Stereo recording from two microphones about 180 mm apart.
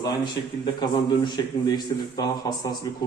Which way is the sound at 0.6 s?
25° left (ahead or behind).